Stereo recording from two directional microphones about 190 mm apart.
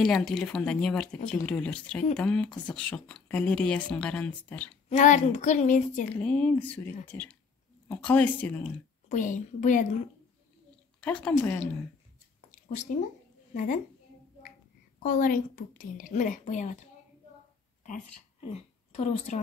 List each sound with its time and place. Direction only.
0.0 s speech: 5° left (ahead or behind)
4.8 s speech: 40° left (ahead or behind)
6.2 s speech: 5° left (ahead or behind)
9.1 s a woman's voice: 40° left (ahead or behind)
11.0 s speech: 5° left (ahead or behind)
12.4 s a sound: 40° left (ahead or behind)
15.0 s a woman's voice: 45° left (ahead or behind)
18.5 s speech: 35° left (ahead or behind)